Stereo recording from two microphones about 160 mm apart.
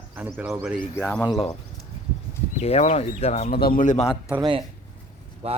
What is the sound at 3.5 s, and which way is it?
Speech, 65° left (ahead or behind).